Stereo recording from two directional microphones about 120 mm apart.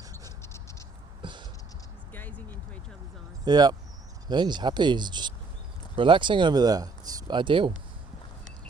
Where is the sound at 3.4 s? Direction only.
35° right (ahead or behind).